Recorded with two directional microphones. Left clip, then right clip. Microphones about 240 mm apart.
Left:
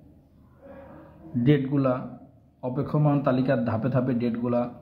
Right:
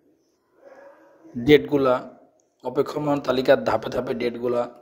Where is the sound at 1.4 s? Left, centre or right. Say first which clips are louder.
Right 7 dB; right.